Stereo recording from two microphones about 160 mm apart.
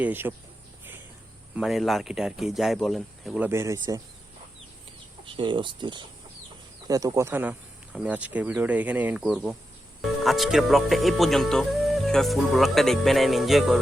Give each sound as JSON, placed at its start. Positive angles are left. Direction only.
{"t": 0.0, "sound": "speech", "side_deg": -10}
{"t": 1.5, "sound": "speech", "side_deg": 0}
{"t": 5.2, "sound": "speech", "side_deg": -30}